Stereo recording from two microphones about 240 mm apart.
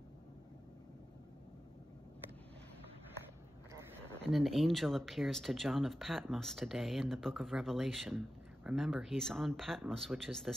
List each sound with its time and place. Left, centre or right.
4.3 s speech: centre